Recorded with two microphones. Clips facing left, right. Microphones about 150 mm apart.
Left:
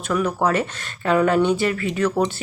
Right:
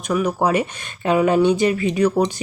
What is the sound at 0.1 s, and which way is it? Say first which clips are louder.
Speech: right 2 dB; 15° right (ahead or behind).